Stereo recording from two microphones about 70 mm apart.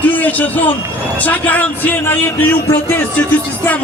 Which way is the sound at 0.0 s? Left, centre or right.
Left.